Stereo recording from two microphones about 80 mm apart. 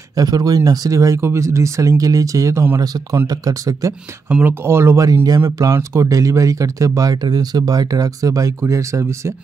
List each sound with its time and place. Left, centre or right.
0.1 s speech: right
2.8 s speech: right
4.3 s speech: centre
4.6 s speech: right
5.0 s speech: right
5.6 s speech: right